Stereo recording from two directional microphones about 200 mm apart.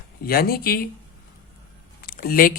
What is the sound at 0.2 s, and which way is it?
Speech, 50° left (ahead or behind).